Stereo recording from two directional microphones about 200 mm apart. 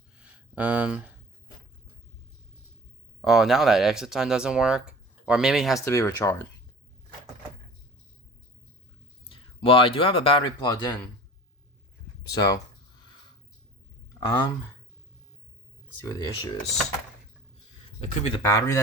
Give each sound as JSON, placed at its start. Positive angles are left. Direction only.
{"t": 0.2, "sound": "a sound", "side_deg": -5}
{"t": 3.2, "sound": "speech", "side_deg": 0}
{"t": 5.8, "sound": "speech", "side_deg": 15}
{"t": 9.3, "sound": "speech", "side_deg": 25}
{"t": 12.3, "sound": "speech", "side_deg": 20}
{"t": 14.1, "sound": "a sound", "side_deg": 20}
{"t": 16.0, "sound": "speech", "side_deg": 15}
{"t": 18.0, "sound": "speech", "side_deg": 30}
{"t": 18.4, "sound": "speech", "side_deg": 15}